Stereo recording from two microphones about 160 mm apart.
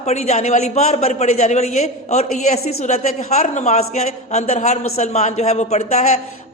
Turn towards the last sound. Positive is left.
turn(degrees=45)  # may be behind; listen again after turning